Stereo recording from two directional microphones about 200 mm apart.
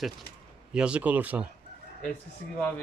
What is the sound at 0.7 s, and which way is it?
Speech, 5° right (ahead or behind).